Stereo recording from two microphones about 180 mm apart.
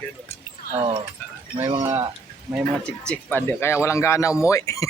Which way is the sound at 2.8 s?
5° left (ahead or behind).